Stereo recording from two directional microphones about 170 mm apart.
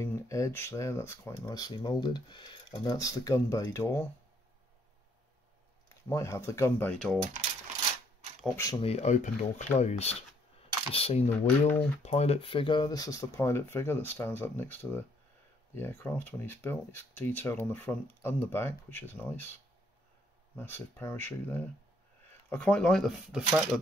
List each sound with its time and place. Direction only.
0.0 s speech: 15° left (ahead or behind)
6.0 s speech: 15° left (ahead or behind)
8.5 s speech: 20° left (ahead or behind)
8.8 s speech: 40° left (ahead or behind); by 19.4 s 10° left (ahead or behind)
20.5 s speech: 15° left (ahead or behind); by 23.8 s 5° right (ahead or behind)